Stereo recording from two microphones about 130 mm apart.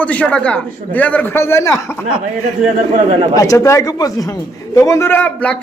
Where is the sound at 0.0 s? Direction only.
10° left (ahead or behind).